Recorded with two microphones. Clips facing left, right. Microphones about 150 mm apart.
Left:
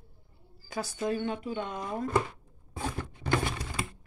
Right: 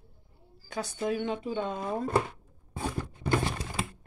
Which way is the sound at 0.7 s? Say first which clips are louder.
Even; centre (ahead or behind).